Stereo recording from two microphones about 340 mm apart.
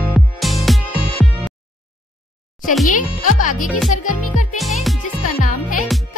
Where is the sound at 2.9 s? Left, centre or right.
Left.